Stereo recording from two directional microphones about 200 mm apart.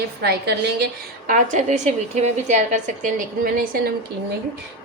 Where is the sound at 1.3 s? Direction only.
40° right (ahead or behind).